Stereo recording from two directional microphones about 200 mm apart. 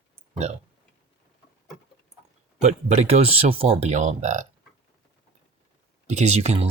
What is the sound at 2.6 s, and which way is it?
Speech, 30° right (ahead or behind).